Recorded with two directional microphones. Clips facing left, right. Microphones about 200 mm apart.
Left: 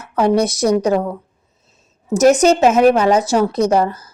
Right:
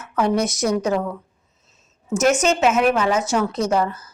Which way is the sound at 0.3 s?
35° left (ahead or behind).